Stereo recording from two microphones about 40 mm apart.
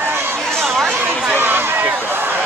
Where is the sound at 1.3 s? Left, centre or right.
Right.